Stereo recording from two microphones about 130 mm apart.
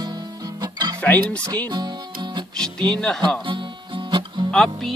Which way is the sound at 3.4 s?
40° right (ahead or behind).